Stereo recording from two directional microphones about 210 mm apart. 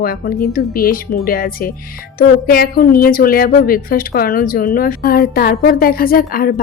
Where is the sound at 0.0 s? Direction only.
45° left (ahead or behind).